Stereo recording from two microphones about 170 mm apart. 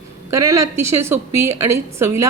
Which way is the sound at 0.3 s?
20° right (ahead or behind).